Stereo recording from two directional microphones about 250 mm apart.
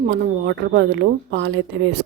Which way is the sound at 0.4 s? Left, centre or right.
Right.